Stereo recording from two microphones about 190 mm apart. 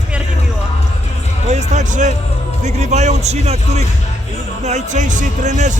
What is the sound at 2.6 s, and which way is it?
Speech, 35° right (ahead or behind).